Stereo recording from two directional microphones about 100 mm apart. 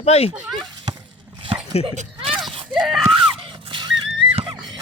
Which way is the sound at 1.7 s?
90° left.